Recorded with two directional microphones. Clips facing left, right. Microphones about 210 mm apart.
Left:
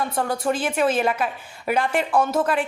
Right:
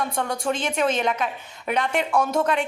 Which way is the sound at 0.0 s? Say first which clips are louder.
Left 2 dB; 5° left (ahead or behind).